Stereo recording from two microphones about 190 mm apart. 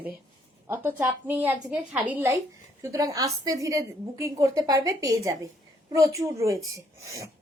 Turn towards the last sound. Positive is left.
turn(degrees=-15)  # may be behind; listen again after turning